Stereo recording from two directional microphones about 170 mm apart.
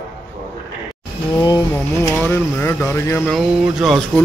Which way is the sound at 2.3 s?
15° left (ahead or behind).